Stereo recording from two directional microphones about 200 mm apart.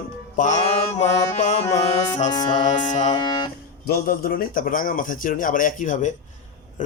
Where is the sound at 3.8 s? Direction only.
45° left (ahead or behind).